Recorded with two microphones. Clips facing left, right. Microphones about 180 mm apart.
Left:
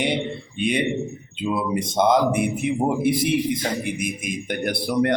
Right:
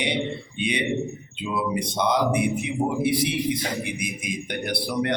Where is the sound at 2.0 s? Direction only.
50° left (ahead or behind).